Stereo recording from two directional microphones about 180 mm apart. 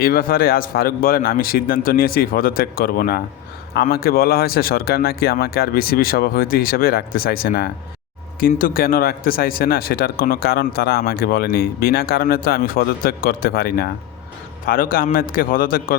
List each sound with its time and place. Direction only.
0.0 s a man's voice: 55° left (ahead or behind)